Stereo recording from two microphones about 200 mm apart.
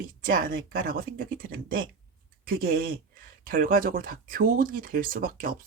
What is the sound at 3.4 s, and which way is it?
Speech, 45° right (ahead or behind).